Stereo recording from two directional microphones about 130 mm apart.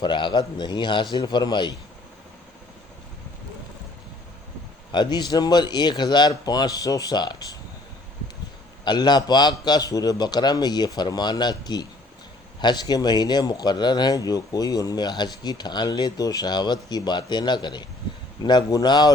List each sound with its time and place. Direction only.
0.0 s speech: 35° left (ahead or behind)
4.9 s speech: 35° left (ahead or behind)
8.8 s speech: 35° left (ahead or behind)